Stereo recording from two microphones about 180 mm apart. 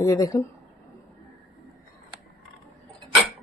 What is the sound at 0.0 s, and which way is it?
Speech, 15° left (ahead or behind).